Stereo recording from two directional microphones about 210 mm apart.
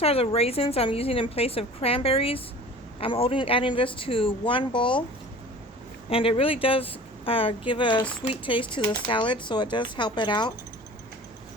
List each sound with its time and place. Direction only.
0.0 s a woman's voice: 30° left (ahead or behind)
6.1 s a woman's voice: 25° left (ahead or behind)